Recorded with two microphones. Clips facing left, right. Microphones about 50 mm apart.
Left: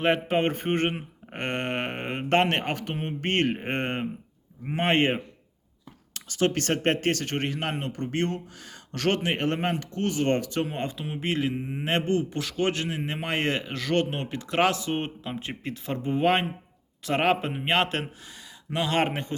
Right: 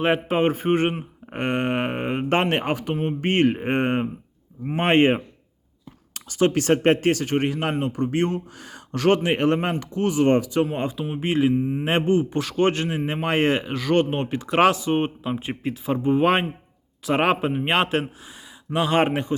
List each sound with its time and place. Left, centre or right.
0.0 s speech: centre
2.9 s speech: centre
3.2 s speech: centre
6.2 s speech: right
11.5 s mantra: centre
11.9 s speech: centre